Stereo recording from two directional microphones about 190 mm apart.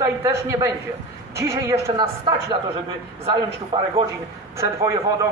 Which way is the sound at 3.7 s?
25° right (ahead or behind).